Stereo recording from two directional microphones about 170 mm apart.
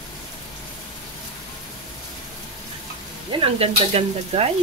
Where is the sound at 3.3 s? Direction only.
35° right (ahead or behind).